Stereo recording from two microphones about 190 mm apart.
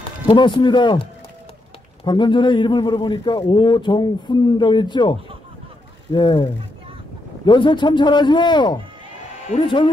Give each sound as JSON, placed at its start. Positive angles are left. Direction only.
{"t": 0.3, "sound": "a man's voice", "side_deg": 25}
{"t": 2.0, "sound": "a man's voice", "side_deg": 25}
{"t": 6.1, "sound": "a man's voice", "side_deg": 20}